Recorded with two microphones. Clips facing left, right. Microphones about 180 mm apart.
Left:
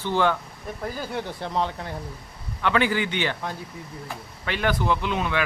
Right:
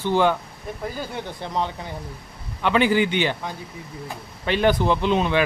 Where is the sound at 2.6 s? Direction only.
20° right (ahead or behind).